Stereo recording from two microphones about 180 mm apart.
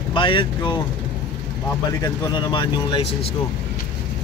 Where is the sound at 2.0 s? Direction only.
25° left (ahead or behind).